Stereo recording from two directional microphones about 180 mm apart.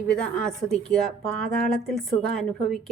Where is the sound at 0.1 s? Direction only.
5° left (ahead or behind).